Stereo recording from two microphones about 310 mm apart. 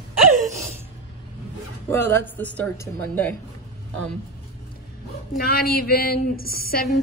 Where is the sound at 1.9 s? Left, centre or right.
Centre.